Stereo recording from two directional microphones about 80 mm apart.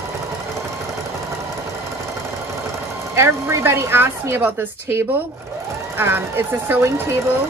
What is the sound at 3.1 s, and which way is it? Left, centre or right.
A woman's voice, right.